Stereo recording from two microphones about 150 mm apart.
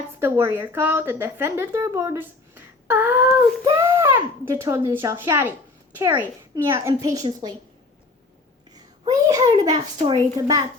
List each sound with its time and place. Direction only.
0.2 s a child's voice: 15° right (ahead or behind)
8.7 s a sound: 25° right (ahead or behind)
9.6 s a child's voice: 25° right (ahead or behind)